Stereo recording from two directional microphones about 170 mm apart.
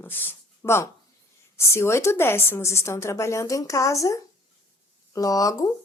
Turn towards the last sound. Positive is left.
turn(degrees=20)  # may be behind; listen again after turning